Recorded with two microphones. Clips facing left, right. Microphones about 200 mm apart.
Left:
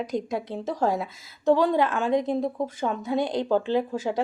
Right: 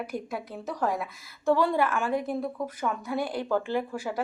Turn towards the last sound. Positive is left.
turn(degrees=25)  # may be behind; listen again after turning